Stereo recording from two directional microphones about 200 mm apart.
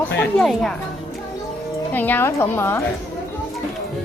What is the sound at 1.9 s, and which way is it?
Speech, 10° left (ahead or behind).